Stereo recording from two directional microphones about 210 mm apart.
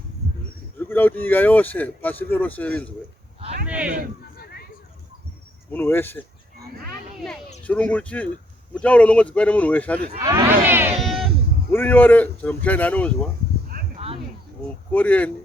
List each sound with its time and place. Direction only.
0.8 s speech: 10° left (ahead or behind)
3.7 s speech: 5° right (ahead or behind)
5.7 s speech: 10° left (ahead or behind)
7.6 s speech: 5° left (ahead or behind)
10.2 s speech: 15° right (ahead or behind)
11.0 s sheep: centre (ahead or behind)
11.7 s speech: 10° left (ahead or behind)
13.7 s a sound: 45° right (ahead or behind)
14.9 s speech: 5° left (ahead or behind)